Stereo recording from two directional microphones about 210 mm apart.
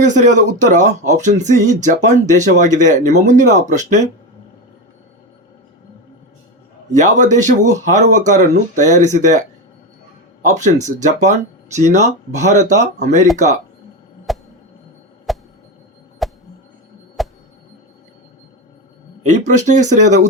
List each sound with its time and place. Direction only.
0.0 s speech: 35° right (ahead or behind)
6.9 s speech: 35° right (ahead or behind)
14.3 s a sound: centre (ahead or behind)
19.2 s speech: 35° right (ahead or behind)